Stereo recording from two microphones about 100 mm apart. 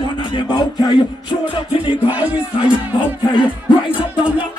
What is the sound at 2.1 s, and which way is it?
Music, 15° right (ahead or behind).